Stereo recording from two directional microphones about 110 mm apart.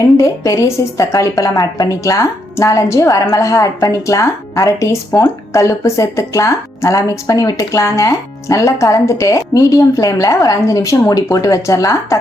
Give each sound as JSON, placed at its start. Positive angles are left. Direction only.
{"t": 0.2, "sound": "a woman's voice", "side_deg": 30}